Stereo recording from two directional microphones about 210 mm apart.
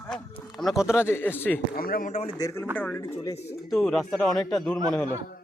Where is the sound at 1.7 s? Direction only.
45° left (ahead or behind).